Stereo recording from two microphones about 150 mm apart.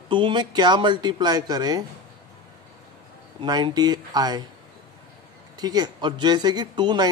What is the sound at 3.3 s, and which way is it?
Speech, 30° right (ahead or behind).